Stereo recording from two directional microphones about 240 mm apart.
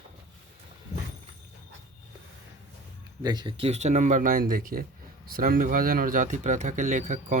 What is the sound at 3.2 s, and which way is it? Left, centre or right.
Speech, centre.